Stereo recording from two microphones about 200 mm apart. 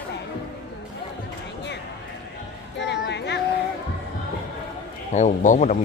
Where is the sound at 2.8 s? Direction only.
60° left (ahead or behind).